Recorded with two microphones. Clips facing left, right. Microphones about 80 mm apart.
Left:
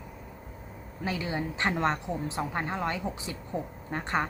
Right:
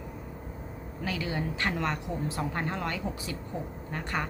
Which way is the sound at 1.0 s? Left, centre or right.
Left.